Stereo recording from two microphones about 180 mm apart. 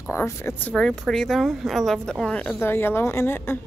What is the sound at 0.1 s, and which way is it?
Speech, 15° left (ahead or behind).